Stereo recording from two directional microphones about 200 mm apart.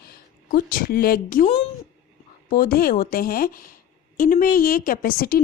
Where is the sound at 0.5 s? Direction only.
45° left (ahead or behind).